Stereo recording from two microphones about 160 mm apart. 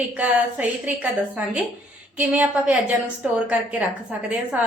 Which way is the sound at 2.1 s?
10° right (ahead or behind).